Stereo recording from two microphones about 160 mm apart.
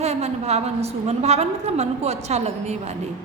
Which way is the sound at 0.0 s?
40° right (ahead or behind).